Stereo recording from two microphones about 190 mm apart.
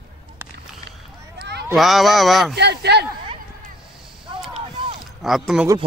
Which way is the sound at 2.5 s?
60° right (ahead or behind).